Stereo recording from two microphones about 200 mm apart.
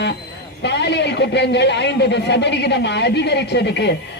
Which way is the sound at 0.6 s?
60° left (ahead or behind).